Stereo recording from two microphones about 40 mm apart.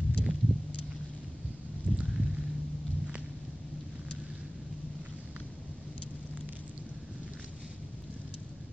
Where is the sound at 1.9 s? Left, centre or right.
Centre.